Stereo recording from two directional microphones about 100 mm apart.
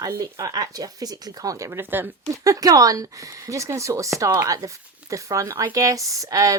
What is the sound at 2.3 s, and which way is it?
Speech, 35° right (ahead or behind).